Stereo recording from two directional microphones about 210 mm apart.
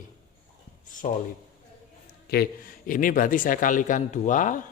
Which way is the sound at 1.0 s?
35° left (ahead or behind).